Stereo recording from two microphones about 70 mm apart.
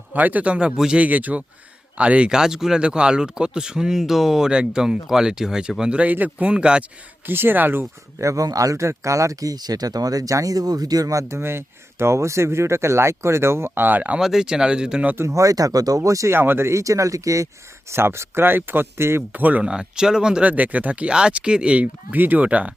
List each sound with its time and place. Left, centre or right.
0.1 s speech: right
7.3 s speech: right
8.2 s speech: right
14.2 s speech: centre
15.0 s speech: right
15.3 s speech: right
16.3 s speech: right
17.9 s speech: right
19.3 s speech: right
19.6 s speech: centre
20.5 s speech: right